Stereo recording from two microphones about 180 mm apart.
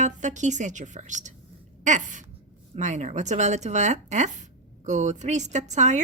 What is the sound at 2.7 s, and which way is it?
A woman's voice, 40° right (ahead or behind).